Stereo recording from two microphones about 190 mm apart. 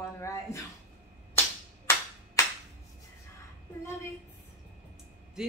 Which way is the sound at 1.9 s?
10° left (ahead or behind).